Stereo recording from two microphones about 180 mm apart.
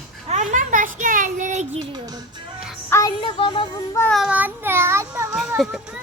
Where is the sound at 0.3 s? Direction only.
40° right (ahead or behind).